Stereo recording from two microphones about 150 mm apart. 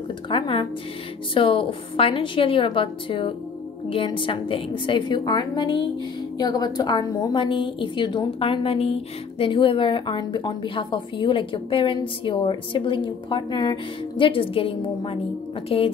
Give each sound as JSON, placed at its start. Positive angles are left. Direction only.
{"t": 0.3, "sound": "a woman's voice", "side_deg": 35}